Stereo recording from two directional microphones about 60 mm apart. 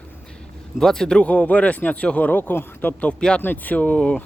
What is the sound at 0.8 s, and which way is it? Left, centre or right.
Speech, centre.